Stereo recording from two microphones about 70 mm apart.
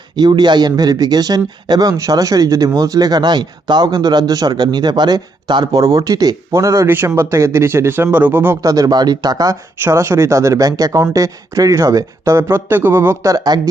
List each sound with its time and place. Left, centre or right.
0.2 s speech: right
1.9 s speech: right
5.8 s speech: right
6.5 s speech: right
6.8 s speech: right
8.6 s speech: right
9.9 s speech: right
12.2 s speech: right
13.2 s speech: right